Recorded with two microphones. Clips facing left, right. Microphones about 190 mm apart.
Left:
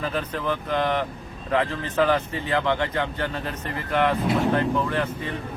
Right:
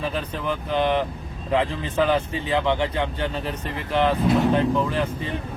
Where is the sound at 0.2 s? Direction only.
15° right (ahead or behind).